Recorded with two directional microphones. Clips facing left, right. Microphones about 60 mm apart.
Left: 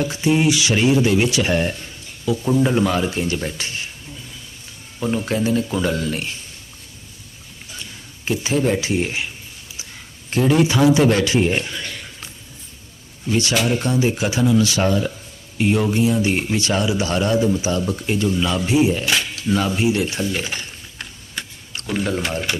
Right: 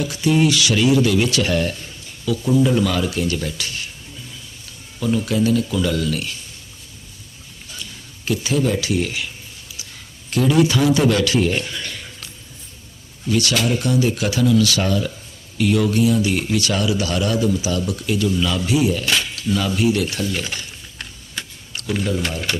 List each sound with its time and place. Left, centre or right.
0.0 s speech: left
4.9 s speech: left
8.2 s speech: left
13.2 s speech: left
21.0 s tick-tock: centre
22.5 s speech: centre